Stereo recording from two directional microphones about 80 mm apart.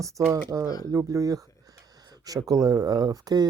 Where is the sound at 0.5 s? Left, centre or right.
Right.